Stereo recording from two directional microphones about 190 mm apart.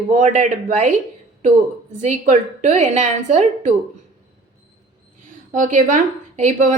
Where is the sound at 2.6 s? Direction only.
40° right (ahead or behind).